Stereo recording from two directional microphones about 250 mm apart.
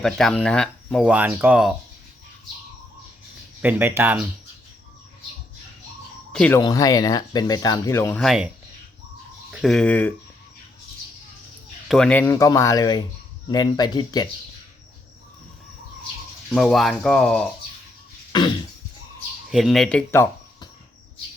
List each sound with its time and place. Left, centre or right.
0.0 s speech: centre
3.6 s speech: centre
6.3 s speech: centre
6.6 s speech: centre
9.5 s speech: centre
11.9 s speech: centre
16.5 s speech: centre
18.3 s cough: centre
19.5 s speech: centre